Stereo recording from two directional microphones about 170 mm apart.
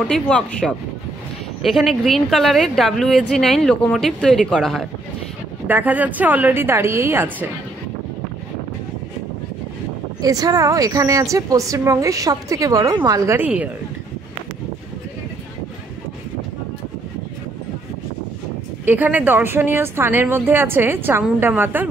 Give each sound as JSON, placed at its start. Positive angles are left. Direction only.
{"t": 0.1, "sound": "a woman's voice", "side_deg": 5}
{"t": 5.7, "sound": "speech", "side_deg": -10}
{"t": 10.2, "sound": "a woman's voice", "side_deg": -20}
{"t": 18.9, "sound": "speech", "side_deg": -10}